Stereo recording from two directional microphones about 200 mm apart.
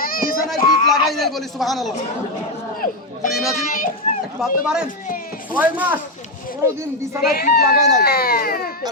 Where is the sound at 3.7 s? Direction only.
40° left (ahead or behind).